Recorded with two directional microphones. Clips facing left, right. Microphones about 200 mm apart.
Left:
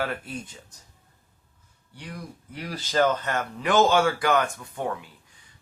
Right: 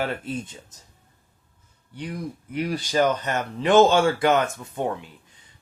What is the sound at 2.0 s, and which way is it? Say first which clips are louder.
Speech: right 7 dB; 20° right (ahead or behind).